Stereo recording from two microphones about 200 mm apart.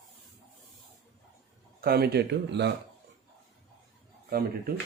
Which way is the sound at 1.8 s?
50° right (ahead or behind).